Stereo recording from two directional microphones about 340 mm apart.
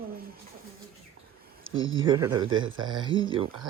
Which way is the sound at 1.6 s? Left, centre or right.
Right.